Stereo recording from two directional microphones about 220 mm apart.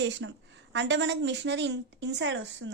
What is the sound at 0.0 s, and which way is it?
A woman's voice, 55° right (ahead or behind).